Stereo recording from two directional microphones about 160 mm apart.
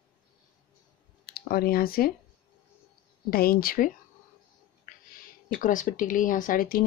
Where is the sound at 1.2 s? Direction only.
70° left (ahead or behind).